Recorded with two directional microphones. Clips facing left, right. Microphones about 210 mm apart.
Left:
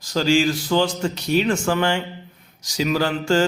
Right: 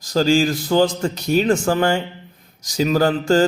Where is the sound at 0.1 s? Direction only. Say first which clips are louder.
Right 2 dB; 40° right (ahead or behind).